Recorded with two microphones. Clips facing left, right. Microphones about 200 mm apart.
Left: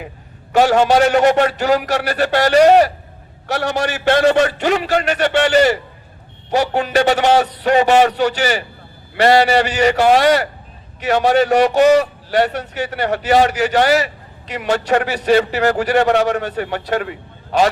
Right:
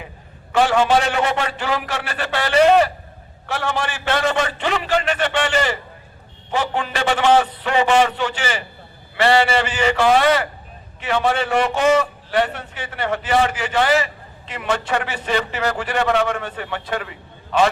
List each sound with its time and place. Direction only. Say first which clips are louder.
0.5 s a man's voice: left 4 dB; 40° left (ahead or behind)